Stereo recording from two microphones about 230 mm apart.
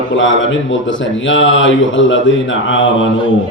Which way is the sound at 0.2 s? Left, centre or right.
Left.